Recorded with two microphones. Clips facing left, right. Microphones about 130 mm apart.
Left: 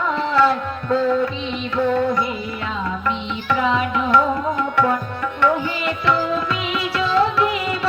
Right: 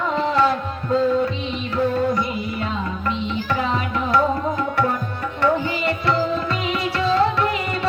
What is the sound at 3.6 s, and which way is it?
Music, 40° right (ahead or behind).